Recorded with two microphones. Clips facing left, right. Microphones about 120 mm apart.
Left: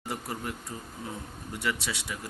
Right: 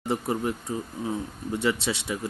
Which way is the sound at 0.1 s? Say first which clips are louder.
Right 9 dB; 25° right (ahead or behind).